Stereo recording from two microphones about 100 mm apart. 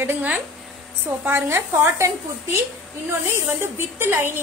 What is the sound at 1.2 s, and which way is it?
Speech, 25° right (ahead or behind).